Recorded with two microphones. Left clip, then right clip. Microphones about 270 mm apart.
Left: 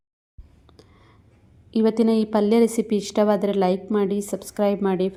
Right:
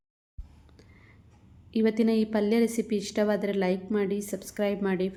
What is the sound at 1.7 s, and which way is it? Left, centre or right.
A woman's voice, centre.